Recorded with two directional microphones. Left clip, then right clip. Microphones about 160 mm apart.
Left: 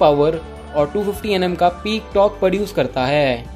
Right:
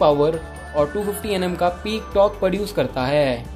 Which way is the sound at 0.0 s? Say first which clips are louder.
Left 3 dB; 25° left (ahead or behind).